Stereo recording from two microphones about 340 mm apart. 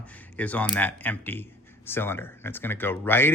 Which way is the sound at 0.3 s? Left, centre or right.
Centre.